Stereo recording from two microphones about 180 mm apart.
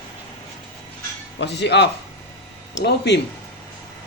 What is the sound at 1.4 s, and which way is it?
Speech, 70° left (ahead or behind).